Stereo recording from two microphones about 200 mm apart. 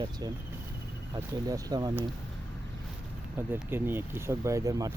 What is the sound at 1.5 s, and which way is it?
Speech, 20° right (ahead or behind).